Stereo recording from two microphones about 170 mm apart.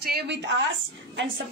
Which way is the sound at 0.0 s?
65° right (ahead or behind).